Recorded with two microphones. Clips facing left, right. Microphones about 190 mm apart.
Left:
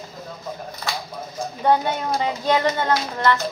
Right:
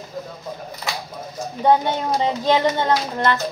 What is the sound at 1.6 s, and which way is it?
Speech, 20° right (ahead or behind).